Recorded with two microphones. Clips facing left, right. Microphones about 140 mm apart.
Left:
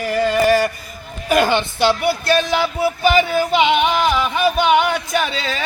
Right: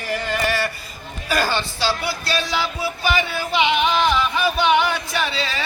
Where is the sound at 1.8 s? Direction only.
55° left (ahead or behind).